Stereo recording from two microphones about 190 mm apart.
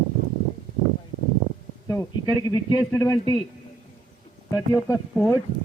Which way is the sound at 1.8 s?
15° left (ahead or behind).